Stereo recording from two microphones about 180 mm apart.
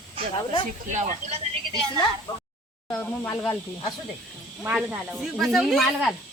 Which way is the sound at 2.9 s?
10° left (ahead or behind).